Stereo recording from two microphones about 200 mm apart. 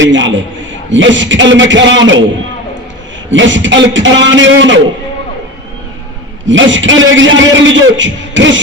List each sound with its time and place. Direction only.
0.1 s a man's voice: 70° right (ahead or behind)
3.3 s a man's voice: 70° right (ahead or behind)
6.4 s a man's voice: 70° right (ahead or behind)